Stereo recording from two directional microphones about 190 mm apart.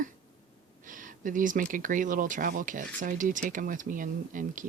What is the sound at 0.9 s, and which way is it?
Speech, 45° right (ahead or behind).